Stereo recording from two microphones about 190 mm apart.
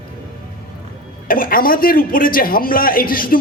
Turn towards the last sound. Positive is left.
turn(degrees=50)  # may be behind; listen again after turning